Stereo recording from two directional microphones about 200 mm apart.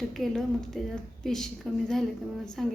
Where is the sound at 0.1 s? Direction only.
Centre (ahead or behind).